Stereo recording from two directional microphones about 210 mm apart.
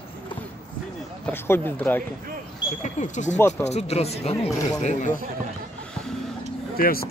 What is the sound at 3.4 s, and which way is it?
Speech, 10° left (ahead or behind).